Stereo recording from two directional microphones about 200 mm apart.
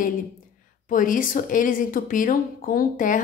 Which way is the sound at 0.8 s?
40° left (ahead or behind).